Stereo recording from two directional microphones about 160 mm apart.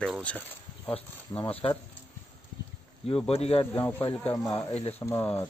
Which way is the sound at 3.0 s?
35° left (ahead or behind).